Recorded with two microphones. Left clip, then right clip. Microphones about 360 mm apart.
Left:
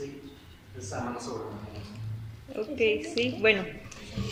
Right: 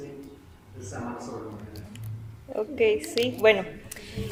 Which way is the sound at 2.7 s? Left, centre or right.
Centre.